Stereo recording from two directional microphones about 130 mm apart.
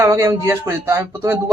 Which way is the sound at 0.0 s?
20° right (ahead or behind).